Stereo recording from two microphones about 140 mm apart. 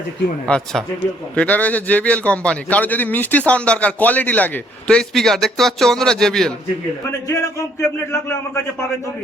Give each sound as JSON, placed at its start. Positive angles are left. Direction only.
{"t": 0.4, "sound": "a man's voice", "side_deg": 5}
{"t": 7.3, "sound": "speech", "side_deg": 20}